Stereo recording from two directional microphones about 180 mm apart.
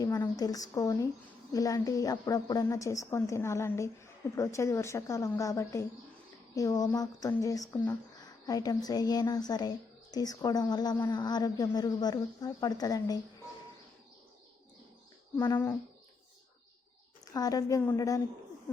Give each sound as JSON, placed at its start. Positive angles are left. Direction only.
{"t": 0.0, "sound": "a woman's voice", "side_deg": 20}
{"t": 15.4, "sound": "a woman's voice", "side_deg": 15}
{"t": 17.3, "sound": "speech", "side_deg": 20}